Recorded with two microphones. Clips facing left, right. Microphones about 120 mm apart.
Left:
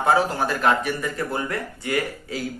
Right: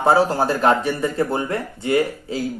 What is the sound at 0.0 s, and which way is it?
Speech, 30° right (ahead or behind).